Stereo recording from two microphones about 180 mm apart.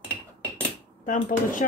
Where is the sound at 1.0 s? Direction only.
45° left (ahead or behind).